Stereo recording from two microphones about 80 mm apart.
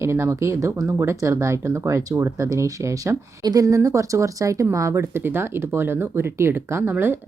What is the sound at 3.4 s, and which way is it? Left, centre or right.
Speech, right.